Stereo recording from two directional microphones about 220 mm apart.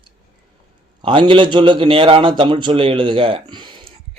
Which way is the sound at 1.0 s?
20° right (ahead or behind).